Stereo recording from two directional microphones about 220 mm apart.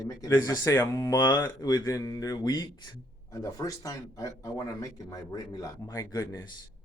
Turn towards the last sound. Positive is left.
turn(degrees=15)  # may be behind; listen again after turning